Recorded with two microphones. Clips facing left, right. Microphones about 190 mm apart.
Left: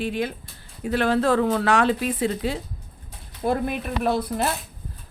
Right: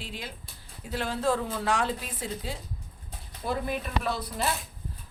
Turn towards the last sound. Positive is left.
turn(degrees=55)  # may be behind; listen again after turning